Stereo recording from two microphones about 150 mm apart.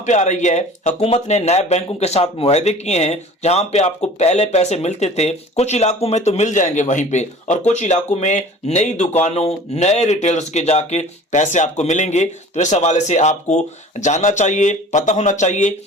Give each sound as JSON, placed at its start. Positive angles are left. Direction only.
{"t": 0.0, "sound": "speech", "side_deg": 50}